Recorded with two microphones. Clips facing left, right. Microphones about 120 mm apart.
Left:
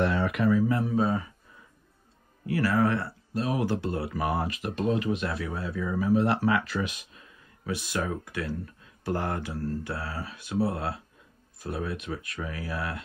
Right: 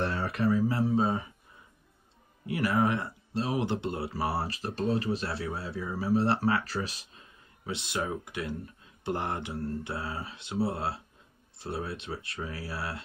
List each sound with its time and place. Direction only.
0.1 s speech: 35° right (ahead or behind)
2.4 s speech: 20° right (ahead or behind)